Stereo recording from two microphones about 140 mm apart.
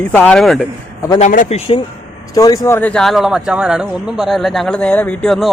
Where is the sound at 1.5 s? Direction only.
40° left (ahead or behind).